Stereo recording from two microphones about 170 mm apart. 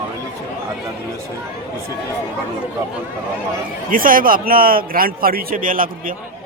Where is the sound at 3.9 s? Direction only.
55° right (ahead or behind).